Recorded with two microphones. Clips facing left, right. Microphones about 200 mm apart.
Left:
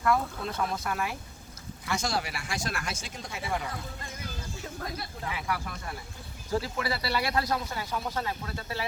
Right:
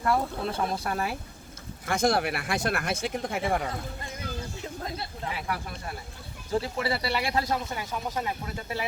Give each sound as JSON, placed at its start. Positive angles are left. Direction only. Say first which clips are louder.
{"t": 0.0, "sound": "speech", "louder": "right 1 dB", "side_deg": -30}
{"t": 1.9, "sound": "speech", "louder": "right 6 dB", "side_deg": -55}
{"t": 4.8, "sound": "speech", "louder": "right 1 dB", "side_deg": -25}